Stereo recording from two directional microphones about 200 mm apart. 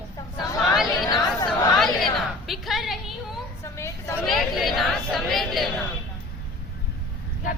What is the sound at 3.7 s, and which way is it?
Vehicle, 15° left (ahead or behind).